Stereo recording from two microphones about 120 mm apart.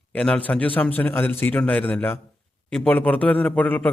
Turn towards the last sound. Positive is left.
turn(degrees=15)  # may be behind; listen again after turning